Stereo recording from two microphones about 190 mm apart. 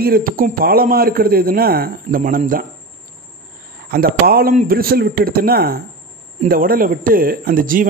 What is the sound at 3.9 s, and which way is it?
A man's voice, 50° right (ahead or behind).